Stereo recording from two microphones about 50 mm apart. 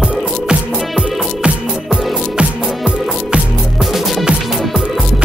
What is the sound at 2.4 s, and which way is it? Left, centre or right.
Music, right.